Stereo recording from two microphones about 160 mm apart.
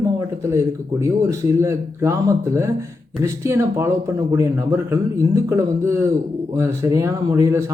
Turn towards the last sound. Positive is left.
turn(degrees=-20)  # may be behind; listen again after turning